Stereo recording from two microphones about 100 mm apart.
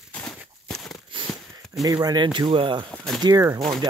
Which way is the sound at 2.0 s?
50° right (ahead or behind).